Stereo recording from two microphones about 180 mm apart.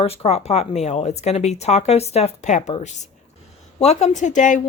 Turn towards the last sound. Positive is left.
turn(degrees=45)  # may be behind; listen again after turning